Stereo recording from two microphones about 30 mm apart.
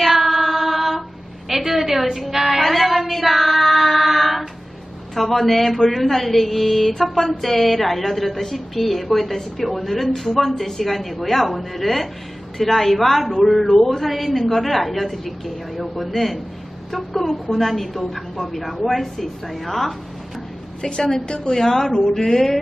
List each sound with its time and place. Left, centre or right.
0.0 s a sound: centre
1.5 s a woman's voice: centre
2.6 s female singing: centre
5.1 s a woman's voice: centre
20.8 s a woman's voice: left
21.5 s speech: centre